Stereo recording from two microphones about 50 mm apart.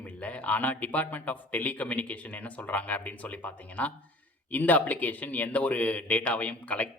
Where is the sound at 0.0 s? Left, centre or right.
Left.